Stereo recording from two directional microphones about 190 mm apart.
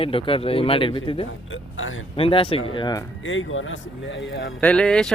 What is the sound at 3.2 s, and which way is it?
Speech, 90° left.